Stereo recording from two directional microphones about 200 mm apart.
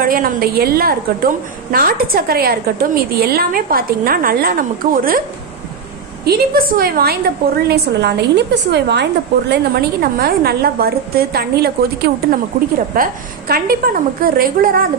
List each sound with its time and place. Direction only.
0.0 s a woman's voice: 45° right (ahead or behind)
6.2 s a woman's voice: 50° right (ahead or behind)